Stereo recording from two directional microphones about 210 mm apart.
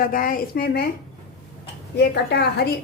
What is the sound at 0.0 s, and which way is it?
Speech, 40° left (ahead or behind).